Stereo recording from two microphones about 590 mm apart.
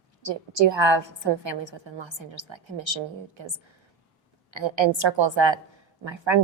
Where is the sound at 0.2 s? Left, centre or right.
Right.